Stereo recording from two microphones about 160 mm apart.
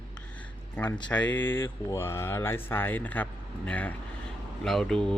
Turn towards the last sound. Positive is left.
turn(degrees=5)  # may be behind; listen again after turning